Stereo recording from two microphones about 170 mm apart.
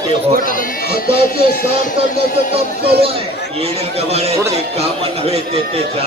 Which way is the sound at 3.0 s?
35° right (ahead or behind).